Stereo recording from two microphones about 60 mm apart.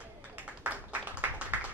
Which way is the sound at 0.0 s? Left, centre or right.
Right.